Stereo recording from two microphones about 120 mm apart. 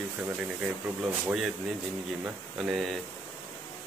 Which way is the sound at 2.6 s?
5° right (ahead or behind).